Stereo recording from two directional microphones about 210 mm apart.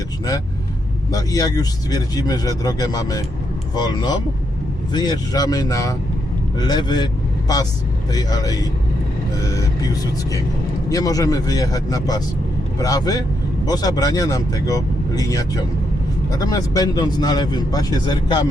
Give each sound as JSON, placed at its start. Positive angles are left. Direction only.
{"t": 1.1, "sound": "a man's voice", "side_deg": 15}
{"t": 9.3, "sound": "vehicle", "side_deg": 15}
{"t": 10.8, "sound": "a man's voice", "side_deg": 15}